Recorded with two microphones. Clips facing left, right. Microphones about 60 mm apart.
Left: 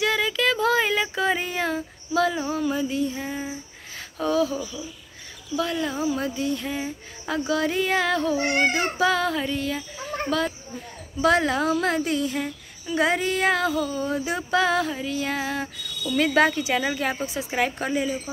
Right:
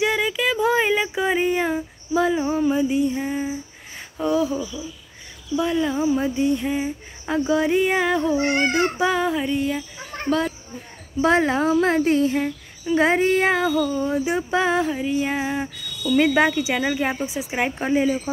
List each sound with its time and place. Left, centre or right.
0.0 s a sound: centre
1.0 s female singing: centre
5.6 s speech: centre
8.7 s female singing: centre
10.3 s speech: right